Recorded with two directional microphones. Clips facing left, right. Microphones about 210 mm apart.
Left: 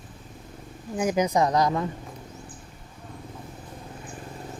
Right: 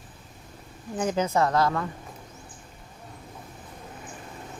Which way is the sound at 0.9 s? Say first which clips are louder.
Left 2 dB; 10° left (ahead or behind).